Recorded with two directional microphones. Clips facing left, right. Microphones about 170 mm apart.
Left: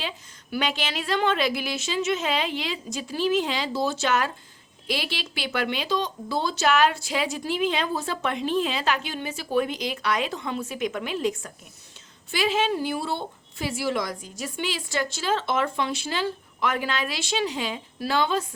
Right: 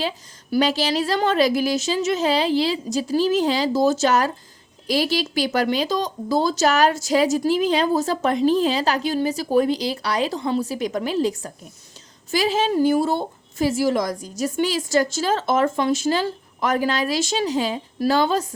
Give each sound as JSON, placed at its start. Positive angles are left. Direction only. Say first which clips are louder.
{"t": 0.5, "sound": "a woman's voice", "louder": "right 8 dB", "side_deg": -35}